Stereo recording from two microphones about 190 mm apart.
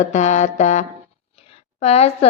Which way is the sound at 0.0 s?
35° left (ahead or behind).